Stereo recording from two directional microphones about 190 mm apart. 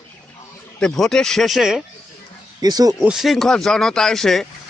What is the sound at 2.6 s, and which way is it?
Speech, 20° right (ahead or behind).